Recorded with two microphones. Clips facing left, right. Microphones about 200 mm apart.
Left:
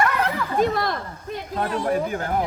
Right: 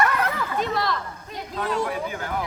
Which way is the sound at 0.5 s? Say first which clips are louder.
Left 6 dB; 50° left (ahead or behind).